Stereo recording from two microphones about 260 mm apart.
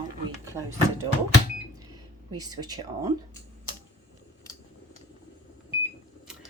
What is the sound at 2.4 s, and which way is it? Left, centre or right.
Speech, centre.